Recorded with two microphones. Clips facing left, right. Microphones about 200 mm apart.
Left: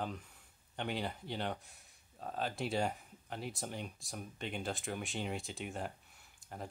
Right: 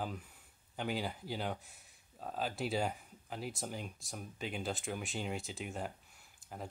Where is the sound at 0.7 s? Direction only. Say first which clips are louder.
Right 1 dB; centre (ahead or behind).